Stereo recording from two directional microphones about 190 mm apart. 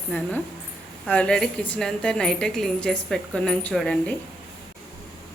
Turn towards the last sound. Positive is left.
turn(degrees=5)  # may be behind; listen again after turning